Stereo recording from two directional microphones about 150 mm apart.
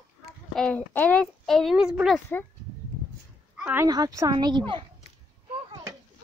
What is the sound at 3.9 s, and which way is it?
Speech, 25° right (ahead or behind).